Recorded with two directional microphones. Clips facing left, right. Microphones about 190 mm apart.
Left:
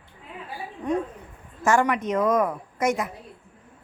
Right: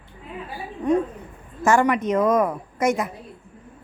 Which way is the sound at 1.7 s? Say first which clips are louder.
Right 3 dB; 20° right (ahead or behind).